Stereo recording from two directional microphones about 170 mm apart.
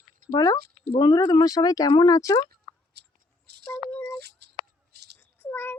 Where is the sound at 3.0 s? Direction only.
75° right (ahead or behind).